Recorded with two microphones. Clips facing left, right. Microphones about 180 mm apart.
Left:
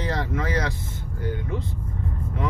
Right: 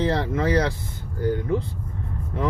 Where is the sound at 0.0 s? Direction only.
30° right (ahead or behind).